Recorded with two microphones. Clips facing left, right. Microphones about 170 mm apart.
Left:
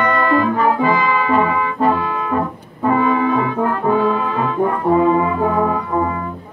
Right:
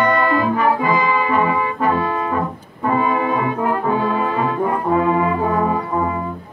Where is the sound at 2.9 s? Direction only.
10° right (ahead or behind).